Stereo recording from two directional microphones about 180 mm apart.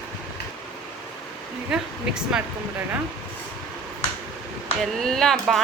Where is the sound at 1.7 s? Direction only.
5° right (ahead or behind).